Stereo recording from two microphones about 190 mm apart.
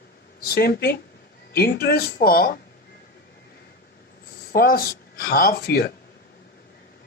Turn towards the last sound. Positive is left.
turn(degrees=55)  # may be behind; listen again after turning